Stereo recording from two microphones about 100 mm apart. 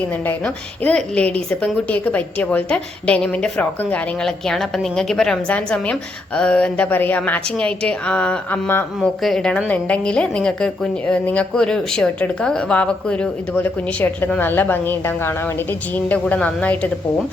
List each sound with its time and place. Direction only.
0.3 s a woman's voice: 10° left (ahead or behind)
13.5 s a woman's voice: 20° left (ahead or behind)
16.0 s a woman's voice: 15° left (ahead or behind)